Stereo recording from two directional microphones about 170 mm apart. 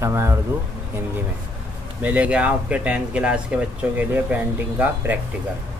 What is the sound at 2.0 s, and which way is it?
Speech, 10° right (ahead or behind).